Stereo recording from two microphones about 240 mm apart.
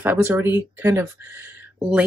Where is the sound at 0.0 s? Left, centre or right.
Centre.